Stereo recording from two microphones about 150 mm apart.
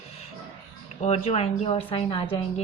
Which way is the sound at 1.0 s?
45° left (ahead or behind).